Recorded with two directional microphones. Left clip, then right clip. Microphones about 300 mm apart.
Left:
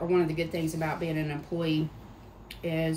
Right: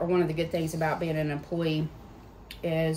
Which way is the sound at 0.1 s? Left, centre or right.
Centre.